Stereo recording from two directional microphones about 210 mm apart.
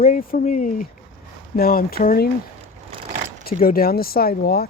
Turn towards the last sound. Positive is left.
turn(degrees=45)  # may be behind; listen again after turning